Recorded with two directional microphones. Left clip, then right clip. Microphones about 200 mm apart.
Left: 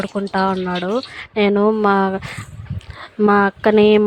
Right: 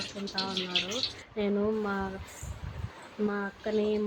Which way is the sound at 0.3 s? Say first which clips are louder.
Left 11 dB; 50° left (ahead or behind).